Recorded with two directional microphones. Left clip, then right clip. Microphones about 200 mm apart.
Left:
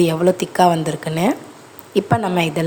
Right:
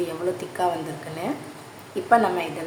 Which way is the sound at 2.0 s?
45° left (ahead or behind).